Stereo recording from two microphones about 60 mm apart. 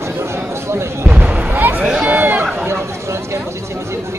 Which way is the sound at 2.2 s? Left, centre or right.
Right.